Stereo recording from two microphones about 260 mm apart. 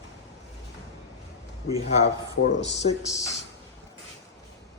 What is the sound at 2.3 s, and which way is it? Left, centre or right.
Speech, left.